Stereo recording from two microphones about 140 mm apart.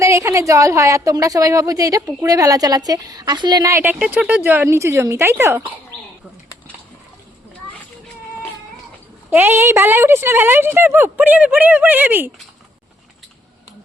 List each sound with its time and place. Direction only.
0.0 s a woman's voice: 20° right (ahead or behind)
3.7 s a woman's voice: 20° right (ahead or behind)
3.9 s a woman's voice: 5° right (ahead or behind)
9.3 s a woman's voice: 15° right (ahead or behind)